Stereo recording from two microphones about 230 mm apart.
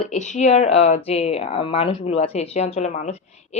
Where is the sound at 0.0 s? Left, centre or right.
Left.